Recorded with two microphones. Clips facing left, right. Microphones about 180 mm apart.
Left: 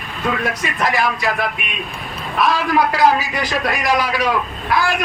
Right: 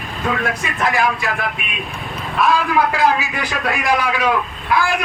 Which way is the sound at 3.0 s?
40° left (ahead or behind).